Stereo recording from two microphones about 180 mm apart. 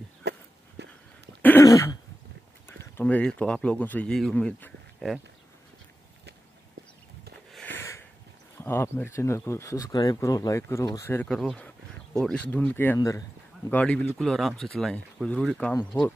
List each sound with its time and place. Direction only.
0.2 s a sound: 70° right (ahead or behind)
1.4 s throat clearing: 15° left (ahead or behind)
3.0 s speech: 10° left (ahead or behind)
7.5 s sniff: 10° left (ahead or behind)
8.5 s speech: 15° left (ahead or behind)